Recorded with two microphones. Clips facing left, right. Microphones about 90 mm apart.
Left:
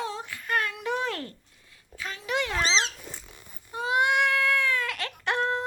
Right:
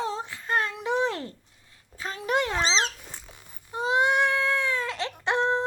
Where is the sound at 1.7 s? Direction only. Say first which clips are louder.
Right 2 dB; 35° right (ahead or behind).